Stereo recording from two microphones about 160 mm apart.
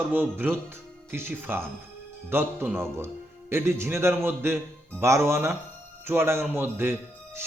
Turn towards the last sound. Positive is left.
turn(degrees=-15)  # may be behind; listen again after turning